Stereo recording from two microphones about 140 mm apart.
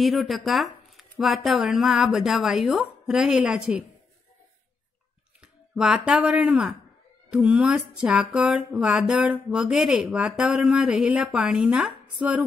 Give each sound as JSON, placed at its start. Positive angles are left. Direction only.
{"t": 0.0, "sound": "a woman's voice", "side_deg": 0}
{"t": 5.4, "sound": "speech", "side_deg": -5}
{"t": 7.2, "sound": "music", "side_deg": -5}